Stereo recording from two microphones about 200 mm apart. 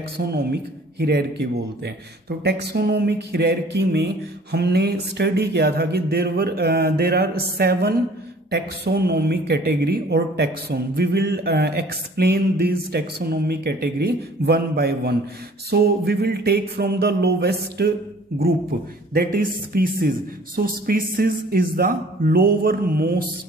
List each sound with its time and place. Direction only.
0.2 s a woman's voice: 55° right (ahead or behind)